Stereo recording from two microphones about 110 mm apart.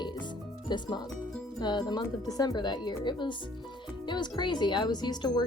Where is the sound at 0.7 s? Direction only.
40° left (ahead or behind).